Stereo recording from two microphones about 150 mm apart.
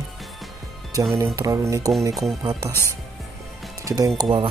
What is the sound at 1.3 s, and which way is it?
Music, 20° right (ahead or behind).